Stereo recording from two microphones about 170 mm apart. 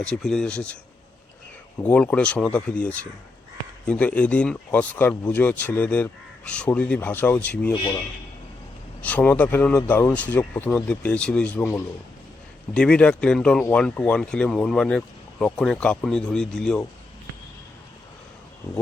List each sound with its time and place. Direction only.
0.0 s speech: 5° left (ahead or behind)
1.8 s speech: 10° left (ahead or behind)
9.0 s speech: 10° left (ahead or behind)